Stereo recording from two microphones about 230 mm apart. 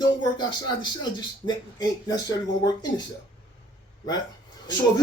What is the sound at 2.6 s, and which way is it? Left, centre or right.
Speech, centre.